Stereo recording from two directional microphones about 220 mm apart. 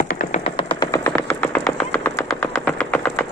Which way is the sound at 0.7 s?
15° left (ahead or behind).